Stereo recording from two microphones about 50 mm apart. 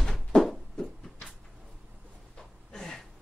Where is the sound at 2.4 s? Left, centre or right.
Centre.